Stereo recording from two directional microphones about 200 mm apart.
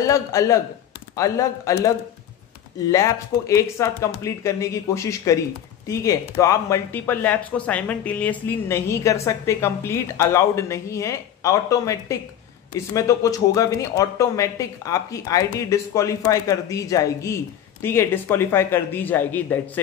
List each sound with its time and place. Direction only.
0.0 s speech: 15° left (ahead or behind)
2.9 s speech: 15° left (ahead or behind)